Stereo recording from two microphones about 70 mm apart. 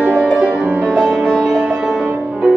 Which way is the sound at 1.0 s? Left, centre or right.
Centre.